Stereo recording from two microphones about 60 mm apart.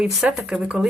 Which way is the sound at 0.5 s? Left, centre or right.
Right.